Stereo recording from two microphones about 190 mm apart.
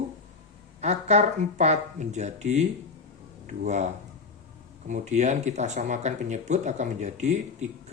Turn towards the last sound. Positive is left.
turn(degrees=-40)  # may be behind; listen again after turning